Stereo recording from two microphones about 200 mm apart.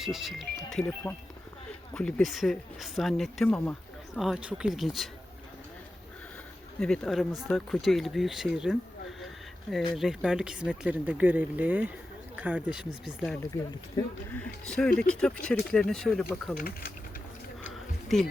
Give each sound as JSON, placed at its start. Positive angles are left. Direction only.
{"t": 0.0, "sound": "speech", "side_deg": 0}
{"t": 6.7, "sound": "speech", "side_deg": 5}
{"t": 9.2, "sound": "a sound", "side_deg": 0}
{"t": 9.9, "sound": "speech", "side_deg": 0}
{"t": 16.6, "sound": "speech", "side_deg": 45}